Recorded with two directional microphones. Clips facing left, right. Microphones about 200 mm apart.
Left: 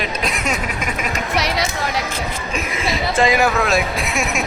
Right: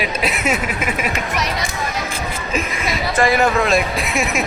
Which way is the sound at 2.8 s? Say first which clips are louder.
Left 1 dB; 25° left (ahead or behind).